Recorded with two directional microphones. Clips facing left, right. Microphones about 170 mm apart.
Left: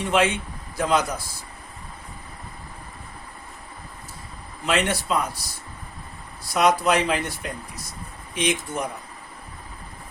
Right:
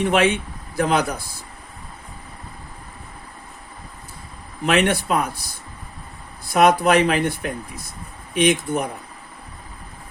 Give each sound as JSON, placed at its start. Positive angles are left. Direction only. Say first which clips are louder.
{"t": 0.0, "sound": "speech", "louder": "right 3 dB", "side_deg": -60}
{"t": 4.6, "sound": "speech", "louder": "right 5 dB", "side_deg": -60}
{"t": 6.5, "sound": "speech", "louder": "right 4 dB", "side_deg": -55}